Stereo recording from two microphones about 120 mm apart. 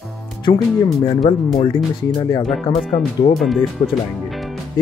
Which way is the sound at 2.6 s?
65° left (ahead or behind).